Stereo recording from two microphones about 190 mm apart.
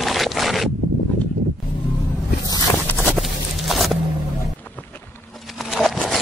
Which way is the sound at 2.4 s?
20° left (ahead or behind).